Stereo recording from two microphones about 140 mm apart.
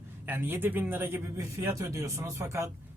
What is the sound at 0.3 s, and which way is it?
Speech, 15° right (ahead or behind).